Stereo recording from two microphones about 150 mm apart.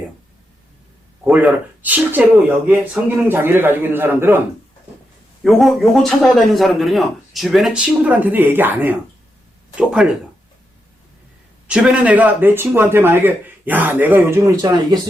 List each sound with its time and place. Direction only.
1.2 s speech: 10° right (ahead or behind)
5.4 s a man's voice: centre (ahead or behind)
11.7 s speech: 5° right (ahead or behind); by 14.9 s 25° right (ahead or behind)